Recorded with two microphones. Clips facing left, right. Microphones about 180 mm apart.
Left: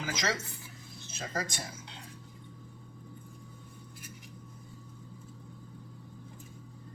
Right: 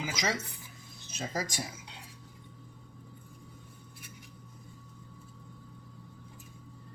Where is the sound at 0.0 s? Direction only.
10° right (ahead or behind).